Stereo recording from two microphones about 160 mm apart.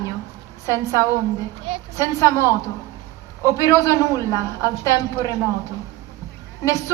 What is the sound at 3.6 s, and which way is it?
A man's voice, 20° left (ahead or behind).